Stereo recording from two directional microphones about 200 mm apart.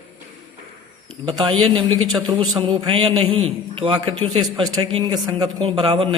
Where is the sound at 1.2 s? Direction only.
25° right (ahead or behind).